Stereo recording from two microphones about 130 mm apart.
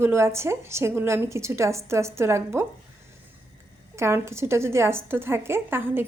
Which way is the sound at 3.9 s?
20° right (ahead or behind).